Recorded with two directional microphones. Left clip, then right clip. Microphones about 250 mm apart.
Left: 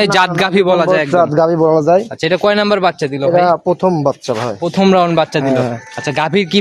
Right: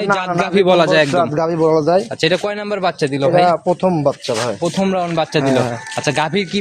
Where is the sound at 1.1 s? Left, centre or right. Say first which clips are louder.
Left 5 dB; left.